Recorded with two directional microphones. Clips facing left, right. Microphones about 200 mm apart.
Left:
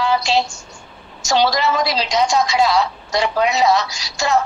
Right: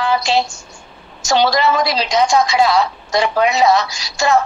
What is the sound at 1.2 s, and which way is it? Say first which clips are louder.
A woman's voice: right 2 dB; 55° right (ahead or behind).